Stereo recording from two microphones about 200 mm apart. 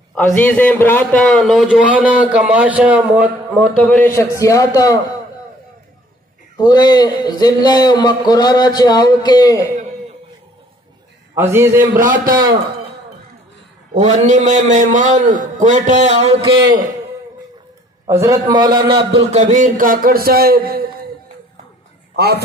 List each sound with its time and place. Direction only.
0.1 s a man's voice: 5° left (ahead or behind)
3.7 s a man's voice: 5° left (ahead or behind)
4.2 s a man's voice: 15° left (ahead or behind)
6.5 s speech: 20° left (ahead or behind)
11.5 s a man's voice: 15° right (ahead or behind)
13.9 s a man's voice: 35° right (ahead or behind)
18.5 s a man's voice: 20° right (ahead or behind); by 20.8 s 50° right (ahead or behind)
22.1 s a man's voice: 55° right (ahead or behind)